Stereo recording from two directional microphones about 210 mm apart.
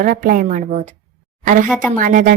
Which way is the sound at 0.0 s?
40° right (ahead or behind).